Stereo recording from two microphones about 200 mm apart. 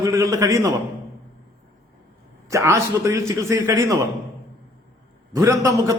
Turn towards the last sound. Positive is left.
turn(degrees=-15)  # may be behind; listen again after turning